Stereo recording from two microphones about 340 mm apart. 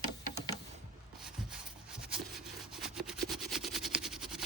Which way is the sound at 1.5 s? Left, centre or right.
Centre.